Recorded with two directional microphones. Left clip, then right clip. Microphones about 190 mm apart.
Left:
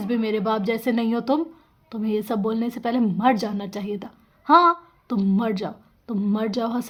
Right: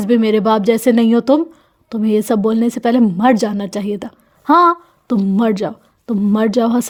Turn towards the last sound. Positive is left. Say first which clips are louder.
# right 10 dB
turn(degrees=-45)  # may be behind; listen again after turning